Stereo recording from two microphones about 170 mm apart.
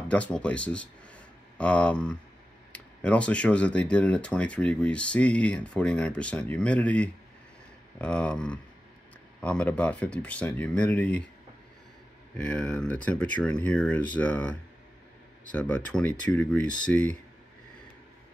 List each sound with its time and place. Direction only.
0.1 s speech: 5° left (ahead or behind)
12.4 s speech: 5° left (ahead or behind)